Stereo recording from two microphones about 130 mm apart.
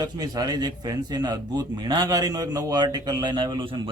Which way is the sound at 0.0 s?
30° right (ahead or behind).